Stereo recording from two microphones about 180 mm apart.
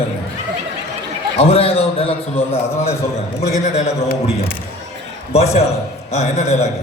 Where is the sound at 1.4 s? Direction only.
35° left (ahead or behind).